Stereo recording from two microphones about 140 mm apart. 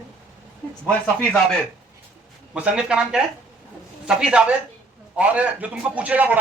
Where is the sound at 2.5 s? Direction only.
10° right (ahead or behind).